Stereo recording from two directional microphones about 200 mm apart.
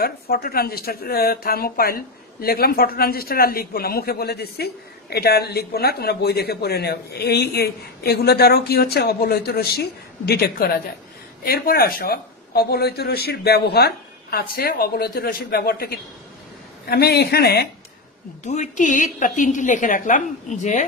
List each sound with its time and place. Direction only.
0.0 s a man's voice: 50° left (ahead or behind)
18.4 s a woman's voice: 35° left (ahead or behind)